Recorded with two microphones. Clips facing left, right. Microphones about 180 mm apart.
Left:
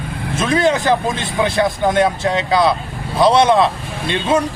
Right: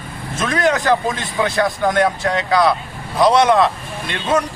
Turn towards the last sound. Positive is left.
turn(degrees=30)  # may be behind; listen again after turning